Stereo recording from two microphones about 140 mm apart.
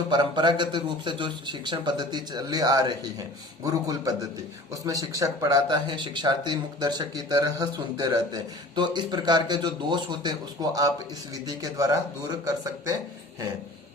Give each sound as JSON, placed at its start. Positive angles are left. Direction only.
{"t": 0.1, "sound": "speech", "side_deg": -30}